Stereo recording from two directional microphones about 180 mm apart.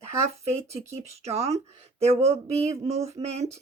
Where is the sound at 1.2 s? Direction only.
35° right (ahead or behind).